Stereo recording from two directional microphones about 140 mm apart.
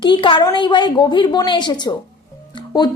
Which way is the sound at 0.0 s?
35° left (ahead or behind).